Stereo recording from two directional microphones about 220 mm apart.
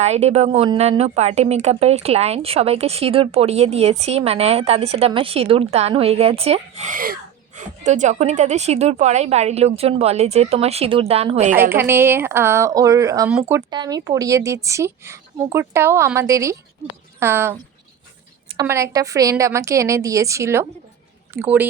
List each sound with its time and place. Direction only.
0.0 s a woman's voice: 30° right (ahead or behind)
11.7 s a woman's voice: 10° right (ahead or behind)